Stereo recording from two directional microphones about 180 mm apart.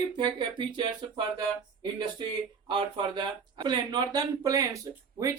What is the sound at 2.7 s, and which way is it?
Speech, 25° right (ahead or behind).